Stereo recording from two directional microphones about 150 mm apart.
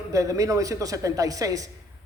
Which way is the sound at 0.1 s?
20° right (ahead or behind).